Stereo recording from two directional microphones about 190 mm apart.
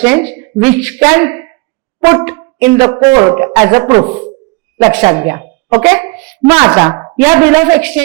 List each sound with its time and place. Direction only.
0.0 s brass instrument: 10° right (ahead or behind)
4.8 s a woman's voice: 15° right (ahead or behind)
6.9 s brass instrument: 20° right (ahead or behind)